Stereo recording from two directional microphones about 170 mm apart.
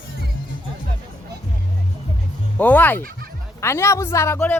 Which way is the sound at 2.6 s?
10° left (ahead or behind).